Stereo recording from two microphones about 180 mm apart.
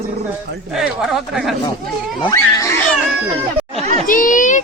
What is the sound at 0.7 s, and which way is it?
Speech, 5° right (ahead or behind).